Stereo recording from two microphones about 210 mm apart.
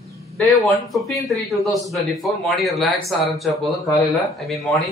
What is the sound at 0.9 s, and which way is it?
Speech, centre (ahead or behind).